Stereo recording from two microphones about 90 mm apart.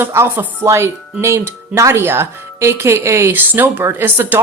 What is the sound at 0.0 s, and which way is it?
A woman's voice, 25° right (ahead or behind).